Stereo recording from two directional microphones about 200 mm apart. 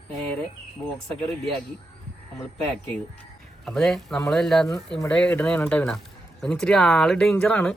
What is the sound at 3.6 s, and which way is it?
Speech, centre (ahead or behind).